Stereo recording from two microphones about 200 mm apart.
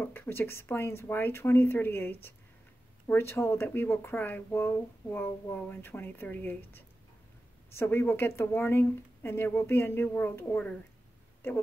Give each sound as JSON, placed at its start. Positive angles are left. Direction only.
{"t": 0.1, "sound": "speech", "side_deg": 10}